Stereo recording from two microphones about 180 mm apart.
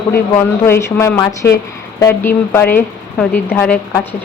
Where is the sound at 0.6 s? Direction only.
15° left (ahead or behind).